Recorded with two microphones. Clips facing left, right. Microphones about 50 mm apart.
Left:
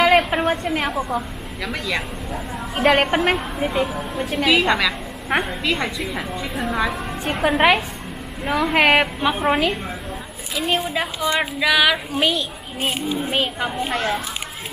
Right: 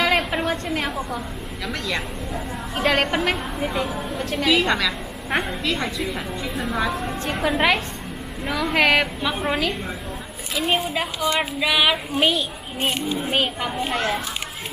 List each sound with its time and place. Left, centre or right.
0.0 s a sound: centre
1.6 s a woman's voice: centre
2.8 s a woman's voice: centre
7.4 s a woman's voice: centre
10.5 s a woman's voice: centre
12.7 s a woman's voice: centre